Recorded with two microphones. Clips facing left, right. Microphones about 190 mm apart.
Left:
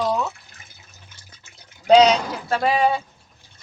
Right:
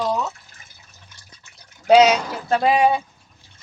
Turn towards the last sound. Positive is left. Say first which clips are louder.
# right 2 dB
turn(degrees=-15)  # may be behind; listen again after turning